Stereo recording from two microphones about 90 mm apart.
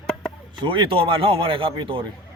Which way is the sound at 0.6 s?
65° right (ahead or behind).